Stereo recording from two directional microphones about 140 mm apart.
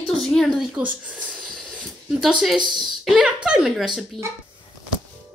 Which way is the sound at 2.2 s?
Centre (ahead or behind).